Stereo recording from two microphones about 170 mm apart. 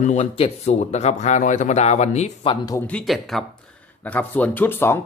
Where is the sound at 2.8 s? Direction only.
5° left (ahead or behind).